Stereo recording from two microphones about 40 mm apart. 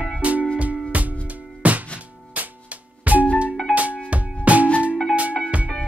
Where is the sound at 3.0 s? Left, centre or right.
Right.